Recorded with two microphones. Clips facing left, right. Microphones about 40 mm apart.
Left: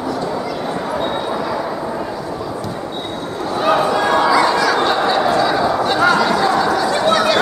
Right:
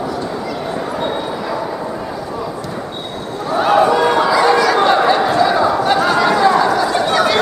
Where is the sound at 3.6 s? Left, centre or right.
Centre.